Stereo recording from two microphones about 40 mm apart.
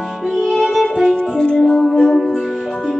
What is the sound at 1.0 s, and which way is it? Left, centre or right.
Music, left.